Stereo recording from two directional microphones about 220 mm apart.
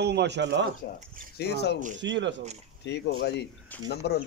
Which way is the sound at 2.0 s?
55° right (ahead or behind).